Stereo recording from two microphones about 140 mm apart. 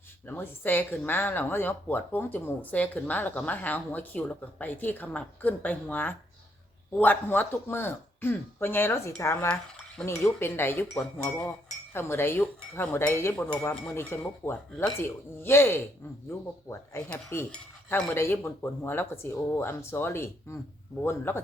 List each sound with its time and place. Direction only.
0.3 s speech: 15° left (ahead or behind)
10.2 s speech: 15° left (ahead or behind)
17.1 s speech: 10° left (ahead or behind)